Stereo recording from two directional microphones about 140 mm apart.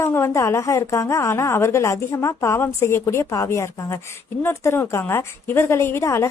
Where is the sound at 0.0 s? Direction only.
20° left (ahead or behind).